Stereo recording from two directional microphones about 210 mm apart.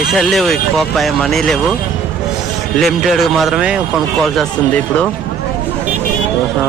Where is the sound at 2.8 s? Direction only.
Centre (ahead or behind).